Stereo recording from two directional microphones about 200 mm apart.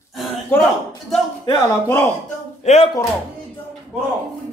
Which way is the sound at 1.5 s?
15° left (ahead or behind).